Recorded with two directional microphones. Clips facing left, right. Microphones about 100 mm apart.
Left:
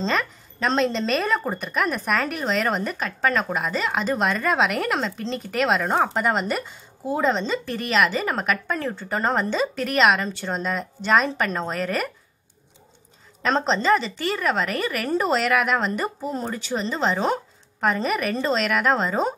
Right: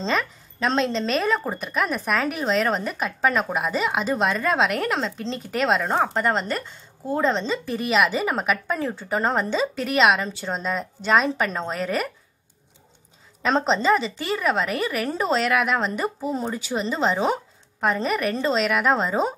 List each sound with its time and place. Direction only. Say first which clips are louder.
0.0 s a woman's voice: even; centre (ahead or behind)
13.4 s a woman's voice: right 1 dB; 5° right (ahead or behind)